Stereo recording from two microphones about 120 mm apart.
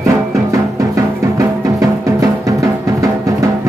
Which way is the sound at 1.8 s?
25° right (ahead or behind).